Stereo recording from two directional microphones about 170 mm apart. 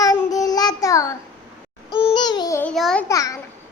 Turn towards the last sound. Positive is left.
turn(degrees=20)  # may be behind; listen again after turning